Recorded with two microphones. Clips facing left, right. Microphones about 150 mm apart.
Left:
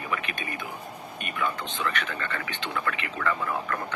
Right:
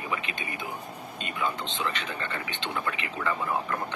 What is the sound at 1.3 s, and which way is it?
Speech, 20° right (ahead or behind).